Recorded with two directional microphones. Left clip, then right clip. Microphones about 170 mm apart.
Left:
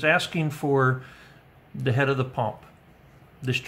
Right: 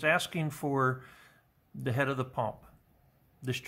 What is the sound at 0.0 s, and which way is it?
Speech, 35° right (ahead or behind).